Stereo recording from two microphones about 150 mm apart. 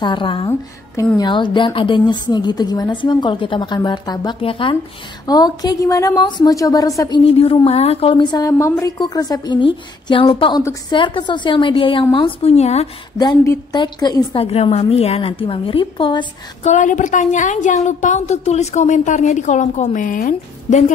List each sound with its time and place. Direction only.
0.0 s a woman's voice: 30° left (ahead or behind)
7.2 s a woman's voice: 40° left (ahead or behind)
13.2 s a woman's voice: 20° left (ahead or behind)
14.4 s a woman's voice: 45° left (ahead or behind)
16.6 s a woman's voice: 55° left (ahead or behind)